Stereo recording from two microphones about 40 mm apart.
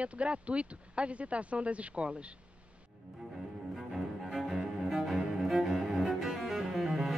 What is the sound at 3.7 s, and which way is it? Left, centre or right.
Cello, centre.